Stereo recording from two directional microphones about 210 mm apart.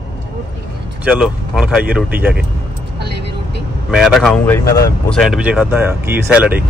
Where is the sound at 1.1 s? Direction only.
5° right (ahead or behind).